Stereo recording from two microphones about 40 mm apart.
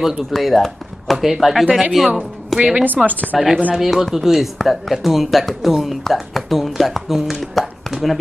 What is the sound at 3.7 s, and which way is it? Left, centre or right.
Speech, centre.